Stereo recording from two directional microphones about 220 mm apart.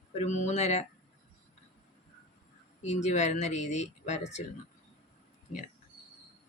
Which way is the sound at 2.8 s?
30° left (ahead or behind).